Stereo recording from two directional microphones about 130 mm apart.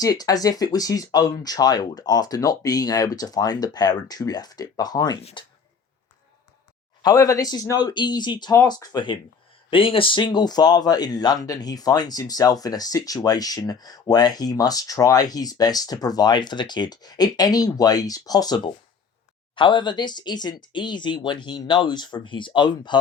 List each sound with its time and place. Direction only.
0.0 s speech: 30° left (ahead or behind)
7.0 s speech: 25° left (ahead or behind)
9.6 s speech: 45° left (ahead or behind)